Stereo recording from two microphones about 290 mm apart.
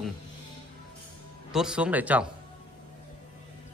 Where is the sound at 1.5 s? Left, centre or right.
Centre.